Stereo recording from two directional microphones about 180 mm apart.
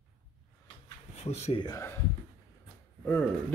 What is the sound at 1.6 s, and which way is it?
Speech, 15° left (ahead or behind).